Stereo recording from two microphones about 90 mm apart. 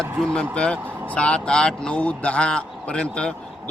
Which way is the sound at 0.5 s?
10° left (ahead or behind).